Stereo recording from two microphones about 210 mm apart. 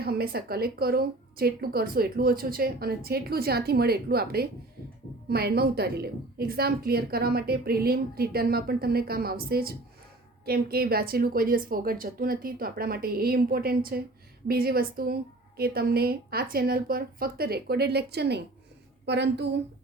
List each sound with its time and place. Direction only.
0.0 s a woman's voice: 45° right (ahead or behind)